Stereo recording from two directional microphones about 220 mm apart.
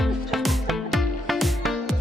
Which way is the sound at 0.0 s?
Centre (ahead or behind).